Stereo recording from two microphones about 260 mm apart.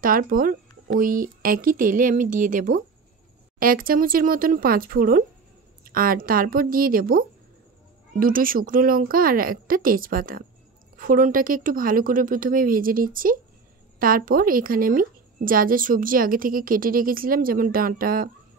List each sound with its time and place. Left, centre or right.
0.0 s a woman's voice: right